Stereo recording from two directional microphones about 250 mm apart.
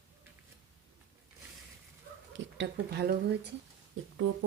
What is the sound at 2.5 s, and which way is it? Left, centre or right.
Speech, right.